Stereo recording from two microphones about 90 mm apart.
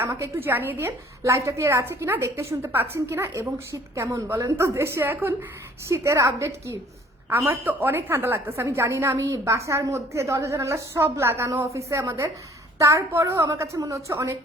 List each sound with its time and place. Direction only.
0.0 s a woman's voice: 30° right (ahead or behind)
5.9 s a woman's voice: 35° right (ahead or behind)